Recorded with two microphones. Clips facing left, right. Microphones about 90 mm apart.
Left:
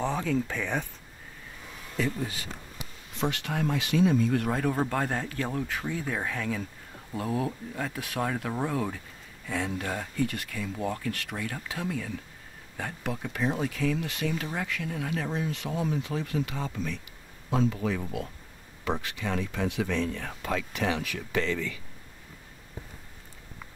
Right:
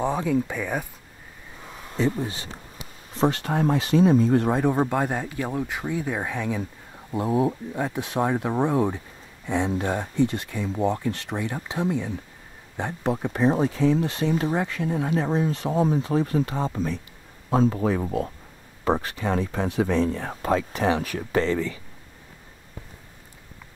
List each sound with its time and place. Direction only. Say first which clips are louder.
0.0 s speech: right 5 dB; 15° right (ahead or behind)
1.7 s a sound: right 6 dB; 30° right (ahead or behind)
3.2 s speech: right 7 dB; 35° right (ahead or behind)